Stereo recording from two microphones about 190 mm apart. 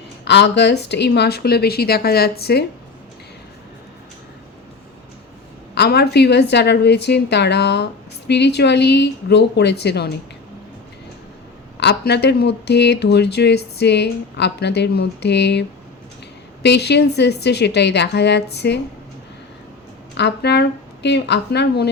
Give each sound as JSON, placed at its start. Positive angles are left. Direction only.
{"t": 0.3, "sound": "speech", "side_deg": 65}
{"t": 5.7, "sound": "speech", "side_deg": 60}
{"t": 11.8, "sound": "speech", "side_deg": 65}
{"t": 16.6, "sound": "speech", "side_deg": 65}
{"t": 20.1, "sound": "speech", "side_deg": 60}